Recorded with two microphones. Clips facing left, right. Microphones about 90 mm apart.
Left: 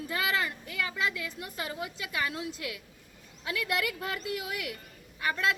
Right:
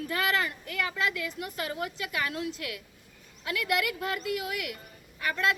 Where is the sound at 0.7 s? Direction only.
25° left (ahead or behind).